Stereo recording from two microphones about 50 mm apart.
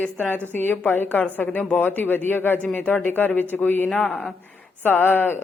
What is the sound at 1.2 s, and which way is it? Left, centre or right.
Speech, left.